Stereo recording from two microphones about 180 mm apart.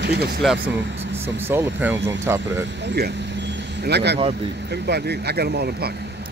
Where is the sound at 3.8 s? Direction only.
65° right (ahead or behind).